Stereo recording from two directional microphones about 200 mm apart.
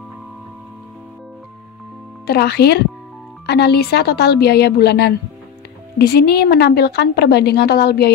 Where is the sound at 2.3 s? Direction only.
55° left (ahead or behind).